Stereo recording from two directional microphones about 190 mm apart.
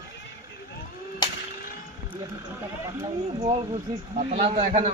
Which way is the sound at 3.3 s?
30° right (ahead or behind).